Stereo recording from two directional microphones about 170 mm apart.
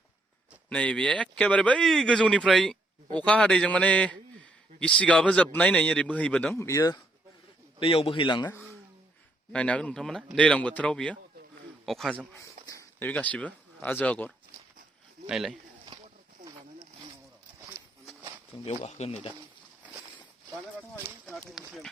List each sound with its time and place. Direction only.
0.7 s speech: 5° left (ahead or behind)
7.8 s speech: 30° left (ahead or behind)
9.5 s speech: 5° left (ahead or behind)
12.3 s speech: 15° left (ahead or behind); by 15.5 s centre (ahead or behind)
16.4 s zipper: 20° right (ahead or behind)
18.5 s speech: 35° left (ahead or behind)